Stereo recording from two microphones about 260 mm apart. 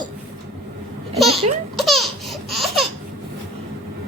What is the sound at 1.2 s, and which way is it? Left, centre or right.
Speech, centre.